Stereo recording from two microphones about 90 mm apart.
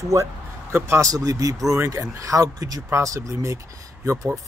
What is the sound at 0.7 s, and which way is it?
Speech, 30° right (ahead or behind).